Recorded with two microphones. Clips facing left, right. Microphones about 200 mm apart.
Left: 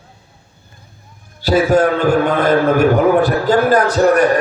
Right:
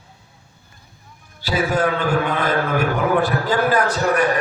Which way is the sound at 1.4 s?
45° left (ahead or behind).